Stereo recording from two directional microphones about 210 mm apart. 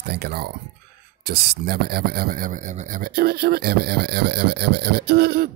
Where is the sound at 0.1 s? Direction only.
50° right (ahead or behind).